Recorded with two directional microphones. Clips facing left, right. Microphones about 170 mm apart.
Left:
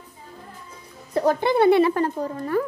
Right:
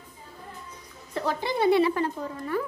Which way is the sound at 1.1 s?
45° left (ahead or behind).